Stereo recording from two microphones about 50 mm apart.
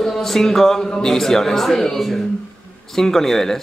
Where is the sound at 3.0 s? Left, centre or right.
Centre.